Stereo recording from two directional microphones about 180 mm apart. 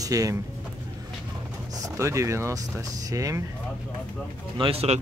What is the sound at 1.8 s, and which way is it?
Speech, 15° right (ahead or behind).